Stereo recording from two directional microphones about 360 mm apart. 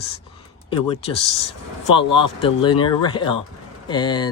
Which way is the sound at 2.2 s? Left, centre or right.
Centre.